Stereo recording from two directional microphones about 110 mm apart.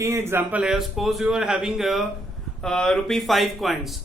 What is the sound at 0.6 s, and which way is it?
Speech, 5° right (ahead or behind).